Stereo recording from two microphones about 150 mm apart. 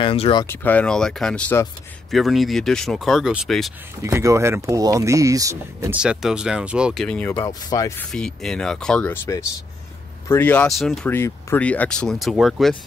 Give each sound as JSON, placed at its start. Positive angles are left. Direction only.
{"t": 0.0, "sound": "speech", "side_deg": 35}
{"t": 0.5, "sound": "speech", "side_deg": 10}
{"t": 4.0, "sound": "speech", "side_deg": -20}
{"t": 5.9, "sound": "speech", "side_deg": -5}
{"t": 7.2, "sound": "speech", "side_deg": 20}
{"t": 8.0, "sound": "speech", "side_deg": 5}
{"t": 10.7, "sound": "speech", "side_deg": 0}
{"t": 11.1, "sound": "speech", "side_deg": 15}